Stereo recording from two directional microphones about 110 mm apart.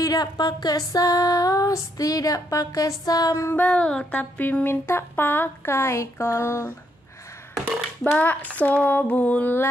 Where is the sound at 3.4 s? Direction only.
15° left (ahead or behind).